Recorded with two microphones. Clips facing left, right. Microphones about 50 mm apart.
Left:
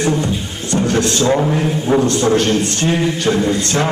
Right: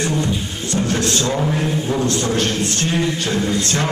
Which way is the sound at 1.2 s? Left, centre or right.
Left.